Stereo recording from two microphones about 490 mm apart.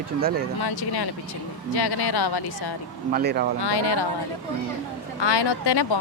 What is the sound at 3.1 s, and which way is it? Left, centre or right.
Speech, centre.